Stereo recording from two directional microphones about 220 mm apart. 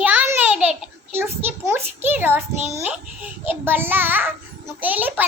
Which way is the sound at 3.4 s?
10° right (ahead or behind).